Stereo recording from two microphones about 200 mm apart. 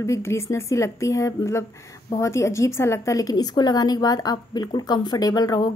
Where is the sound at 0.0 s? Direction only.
15° left (ahead or behind).